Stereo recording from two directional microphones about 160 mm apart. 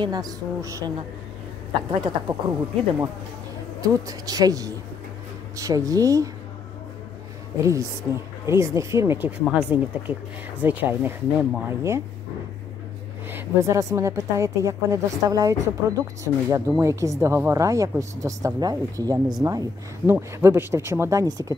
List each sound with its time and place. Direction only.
0.0 s a woman's voice: 25° right (ahead or behind)
1.7 s speech: 30° right (ahead or behind)
3.8 s a woman's voice: 20° right (ahead or behind)
7.5 s a woman's voice: 20° right (ahead or behind)
13.3 s a woman's voice: 20° right (ahead or behind)